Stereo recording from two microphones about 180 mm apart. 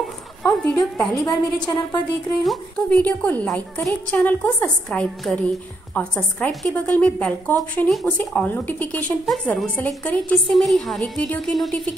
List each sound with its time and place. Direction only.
0.0 s speech: 5° left (ahead or behind)
1.7 s a woman's voice: 20° left (ahead or behind)
2.4 s a woman's voice: 5° left (ahead or behind)